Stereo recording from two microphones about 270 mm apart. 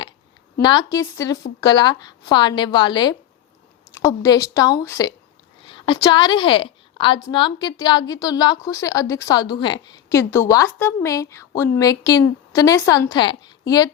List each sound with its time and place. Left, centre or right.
0.6 s a woman's voice: centre